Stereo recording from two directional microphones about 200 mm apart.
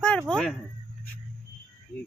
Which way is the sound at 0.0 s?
5° left (ahead or behind).